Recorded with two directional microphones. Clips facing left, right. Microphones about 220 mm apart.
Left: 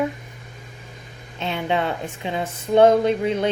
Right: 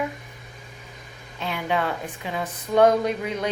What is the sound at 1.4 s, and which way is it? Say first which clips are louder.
Speech: left 3 dB; 25° left (ahead or behind).